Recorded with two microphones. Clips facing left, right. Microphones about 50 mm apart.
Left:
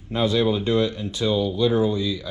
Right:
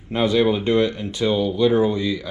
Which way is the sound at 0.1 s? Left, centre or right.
Right.